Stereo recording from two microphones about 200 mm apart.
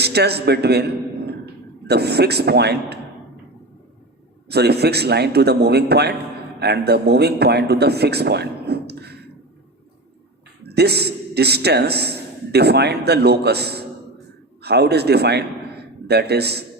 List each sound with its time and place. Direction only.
0.0 s a man's voice: 55° right (ahead or behind)
1.9 s a man's voice: 55° right (ahead or behind)
4.4 s a man's voice: 55° right (ahead or behind)
10.6 s a man's voice: 55° right (ahead or behind)